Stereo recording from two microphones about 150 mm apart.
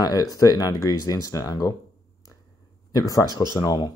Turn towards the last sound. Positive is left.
turn(degrees=25)  # may be behind; listen again after turning